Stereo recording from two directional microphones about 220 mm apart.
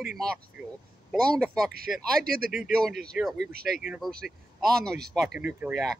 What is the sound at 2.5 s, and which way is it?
Speech, centre (ahead or behind).